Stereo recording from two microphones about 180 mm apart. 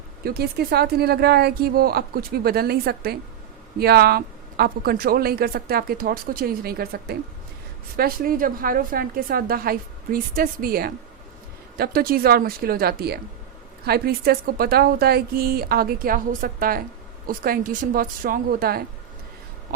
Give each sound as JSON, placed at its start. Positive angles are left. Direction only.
{"t": 0.3, "sound": "a woman's voice", "side_deg": -60}